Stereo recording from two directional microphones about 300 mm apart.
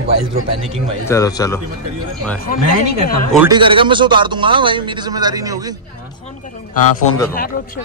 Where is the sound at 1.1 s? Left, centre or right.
Centre.